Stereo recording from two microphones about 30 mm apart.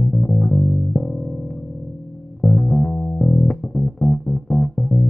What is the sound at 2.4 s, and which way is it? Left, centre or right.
Music, left.